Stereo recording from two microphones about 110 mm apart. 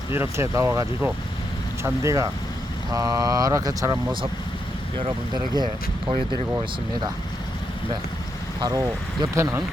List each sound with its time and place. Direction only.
0.1 s speech: 25° right (ahead or behind)
4.9 s speech: 45° right (ahead or behind)
8.6 s speech: 35° right (ahead or behind)